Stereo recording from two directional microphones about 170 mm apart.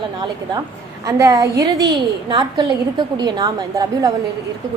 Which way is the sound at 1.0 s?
20° right (ahead or behind).